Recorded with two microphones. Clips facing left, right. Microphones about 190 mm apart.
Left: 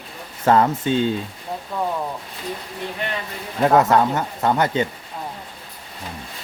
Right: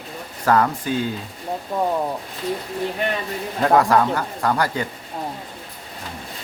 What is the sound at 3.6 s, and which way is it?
Speech, 20° left (ahead or behind).